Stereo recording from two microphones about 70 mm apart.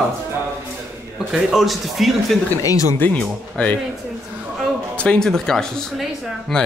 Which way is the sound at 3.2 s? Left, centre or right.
Centre.